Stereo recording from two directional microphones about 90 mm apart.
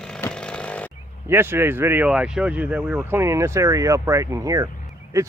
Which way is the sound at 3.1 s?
30° right (ahead or behind).